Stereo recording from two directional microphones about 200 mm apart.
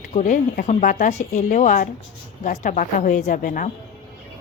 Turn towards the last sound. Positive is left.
turn(degrees=40)  # may be behind; listen again after turning